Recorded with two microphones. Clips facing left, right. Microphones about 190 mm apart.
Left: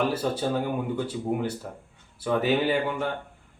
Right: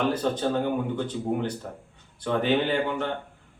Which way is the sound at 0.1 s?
10° left (ahead or behind).